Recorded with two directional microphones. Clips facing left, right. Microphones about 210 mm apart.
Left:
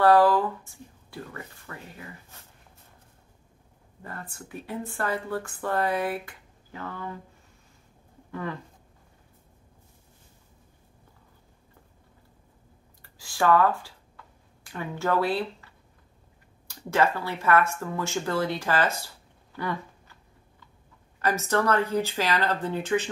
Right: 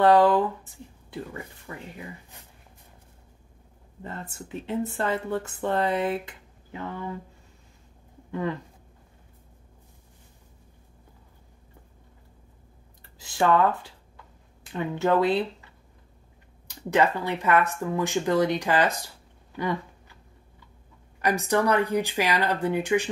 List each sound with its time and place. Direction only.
0.0 s speech: 20° right (ahead or behind)
4.0 s speech: 25° right (ahead or behind)
8.3 s speech: 20° right (ahead or behind)
13.0 s speech: 20° right (ahead or behind)
16.6 s speech: 20° right (ahead or behind)
21.2 s speech: 15° right (ahead or behind)